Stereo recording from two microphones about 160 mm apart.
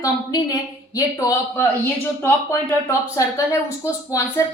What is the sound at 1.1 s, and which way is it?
Speech, 15° left (ahead or behind).